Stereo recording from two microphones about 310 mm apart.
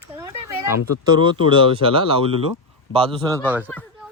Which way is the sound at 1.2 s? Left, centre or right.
Centre.